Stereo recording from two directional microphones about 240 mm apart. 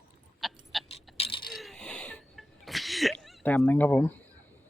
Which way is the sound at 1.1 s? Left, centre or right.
Left.